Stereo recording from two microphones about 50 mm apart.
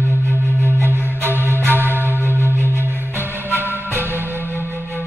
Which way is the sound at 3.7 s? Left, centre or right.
Right.